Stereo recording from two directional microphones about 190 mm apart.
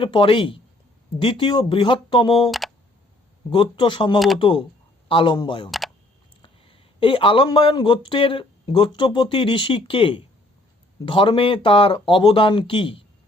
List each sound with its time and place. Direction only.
0.0 s speech: 25° left (ahead or behind)
2.5 s computer keyboard: centre (ahead or behind)
3.5 s speech: 25° left (ahead or behind)